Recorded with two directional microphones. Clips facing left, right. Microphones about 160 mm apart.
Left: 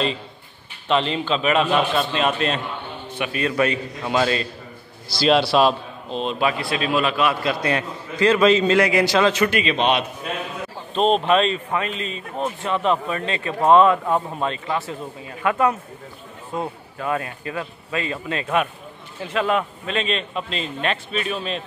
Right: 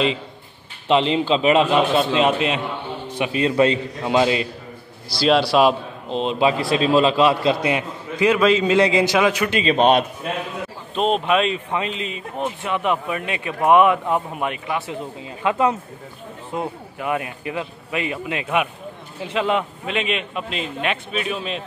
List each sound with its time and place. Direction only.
0.8 s a man's voice: 20° right (ahead or behind)
5.2 s a man's voice: 5° right (ahead or behind)
6.0 s a man's voice: 20° right (ahead or behind)
8.4 s a man's voice: 5° right (ahead or behind)
8.7 s speech: 20° right (ahead or behind)
9.6 s a man's voice: 40° right (ahead or behind)
11.0 s a man's voice: 5° right (ahead or behind)